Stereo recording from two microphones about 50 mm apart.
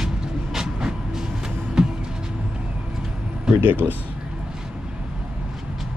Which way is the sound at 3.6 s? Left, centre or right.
Right.